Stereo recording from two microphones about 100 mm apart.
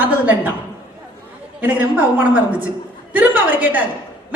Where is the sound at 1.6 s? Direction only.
15° right (ahead or behind).